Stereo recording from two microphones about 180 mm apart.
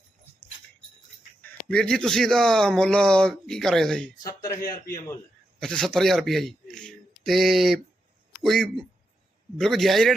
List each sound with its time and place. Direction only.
1.4 s speech: 5° left (ahead or behind)
4.2 s speech: 20° left (ahead or behind)
5.5 s a man's voice: 5° left (ahead or behind)